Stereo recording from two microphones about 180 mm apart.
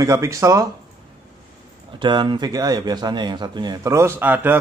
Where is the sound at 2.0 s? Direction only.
25° right (ahead or behind).